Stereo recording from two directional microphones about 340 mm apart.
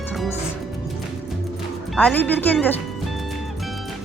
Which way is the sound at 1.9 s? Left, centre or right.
Centre.